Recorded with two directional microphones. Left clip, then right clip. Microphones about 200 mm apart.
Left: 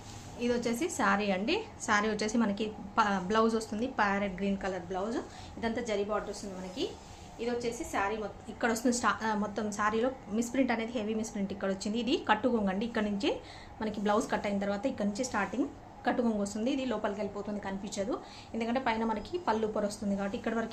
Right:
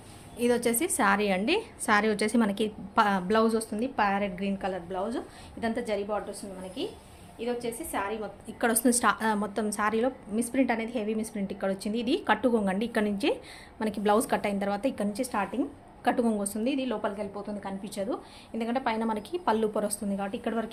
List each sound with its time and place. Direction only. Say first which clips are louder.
0.3 s a woman's voice: right 6 dB; 50° right (ahead or behind)
7.3 s a woman's voice: right 2 dB; 35° right (ahead or behind)